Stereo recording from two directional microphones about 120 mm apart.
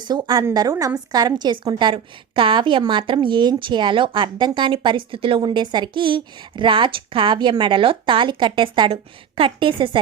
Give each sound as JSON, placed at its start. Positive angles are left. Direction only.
{"t": 0.0, "sound": "a woman's voice", "side_deg": -35}